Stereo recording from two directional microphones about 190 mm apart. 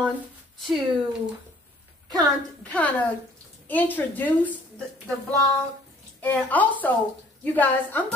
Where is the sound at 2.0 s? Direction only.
20° right (ahead or behind).